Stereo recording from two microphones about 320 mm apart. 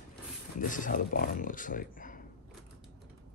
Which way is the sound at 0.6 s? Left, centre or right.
Left.